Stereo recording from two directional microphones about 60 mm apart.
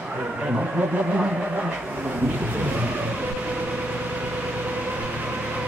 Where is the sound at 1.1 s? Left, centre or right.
Centre.